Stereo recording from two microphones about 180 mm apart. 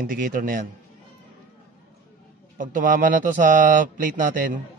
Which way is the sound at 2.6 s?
45° right (ahead or behind).